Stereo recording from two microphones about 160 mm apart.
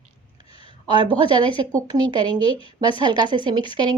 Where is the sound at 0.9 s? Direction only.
30° right (ahead or behind).